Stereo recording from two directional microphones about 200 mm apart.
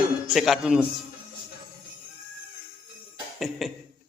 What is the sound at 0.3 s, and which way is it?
Speech, centre (ahead or behind).